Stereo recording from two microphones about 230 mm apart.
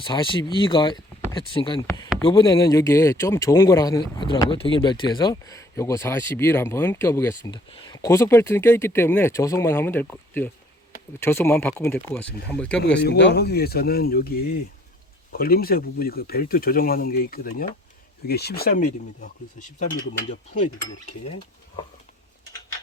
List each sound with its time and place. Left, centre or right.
0.0 s speech: left; by 12.8 s centre
13.0 s speech: left